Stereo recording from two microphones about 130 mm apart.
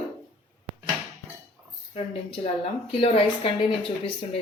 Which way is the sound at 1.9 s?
50° left (ahead or behind).